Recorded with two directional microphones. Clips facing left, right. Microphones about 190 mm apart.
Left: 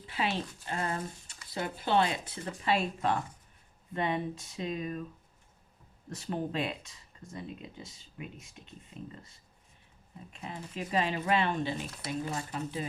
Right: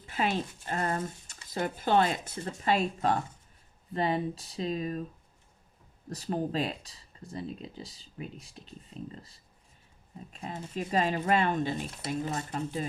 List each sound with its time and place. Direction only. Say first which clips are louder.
0.1 s speech: right 3 dB; 45° right (ahead or behind)
6.1 s speech: right 3 dB; 35° right (ahead or behind)
10.4 s speech: right 3 dB; 40° right (ahead or behind)